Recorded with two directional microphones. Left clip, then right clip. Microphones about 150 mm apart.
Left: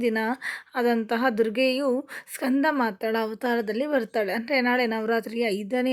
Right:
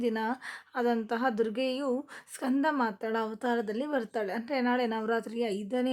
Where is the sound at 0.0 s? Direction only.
20° left (ahead or behind).